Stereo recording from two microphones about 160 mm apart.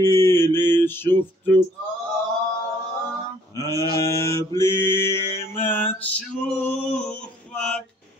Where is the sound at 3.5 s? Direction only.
20° left (ahead or behind).